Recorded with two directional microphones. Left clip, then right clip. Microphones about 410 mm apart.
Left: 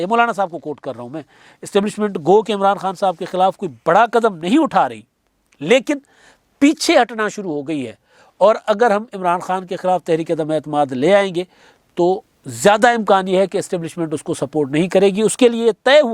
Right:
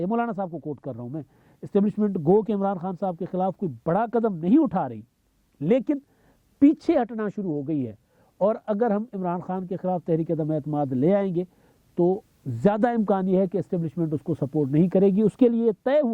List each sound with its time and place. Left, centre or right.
0.0 s speech: centre
0.5 s speech: centre
0.8 s speech: centre